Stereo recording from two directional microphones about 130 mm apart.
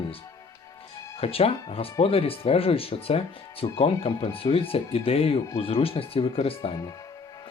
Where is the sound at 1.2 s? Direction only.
50° left (ahead or behind).